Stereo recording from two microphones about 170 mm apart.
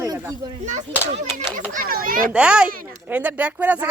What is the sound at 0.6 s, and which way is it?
Speech, 45° right (ahead or behind).